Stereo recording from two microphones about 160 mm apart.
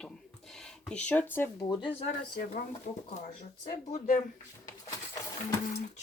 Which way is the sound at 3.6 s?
45° left (ahead or behind).